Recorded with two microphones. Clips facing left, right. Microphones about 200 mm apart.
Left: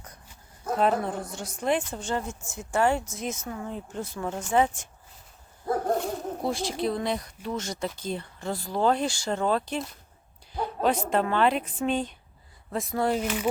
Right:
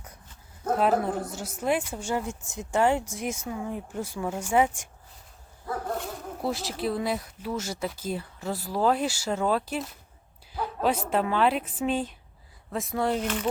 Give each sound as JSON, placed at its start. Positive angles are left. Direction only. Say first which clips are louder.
{"t": 0.8, "sound": "a woman's voice", "louder": "even", "side_deg": -5}
{"t": 5.6, "sound": "zipper", "louder": "left 6 dB", "side_deg": 40}
{"t": 6.0, "sound": "speech", "louder": "left 3 dB", "side_deg": 0}
{"t": 10.5, "sound": "a sound", "louder": "left 1 dB", "side_deg": -5}
{"t": 11.1, "sound": "speech", "louder": "even", "side_deg": -5}